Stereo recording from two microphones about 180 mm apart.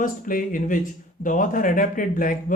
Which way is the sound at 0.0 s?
50° left (ahead or behind).